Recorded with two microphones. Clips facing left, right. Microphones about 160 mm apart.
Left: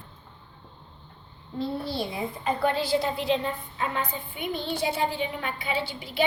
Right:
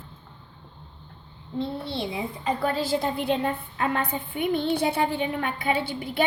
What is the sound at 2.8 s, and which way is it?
A woman's voice, 50° right (ahead or behind).